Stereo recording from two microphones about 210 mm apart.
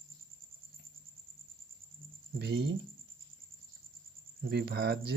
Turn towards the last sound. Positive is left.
turn(degrees=-50)  # may be behind; listen again after turning